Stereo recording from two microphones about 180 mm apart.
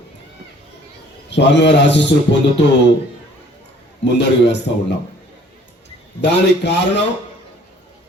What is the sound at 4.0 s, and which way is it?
Speech, 75° left (ahead or behind).